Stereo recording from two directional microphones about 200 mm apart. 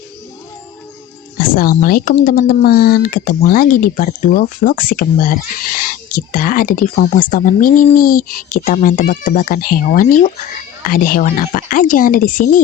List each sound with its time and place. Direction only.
1.4 s speech: 45° left (ahead or behind)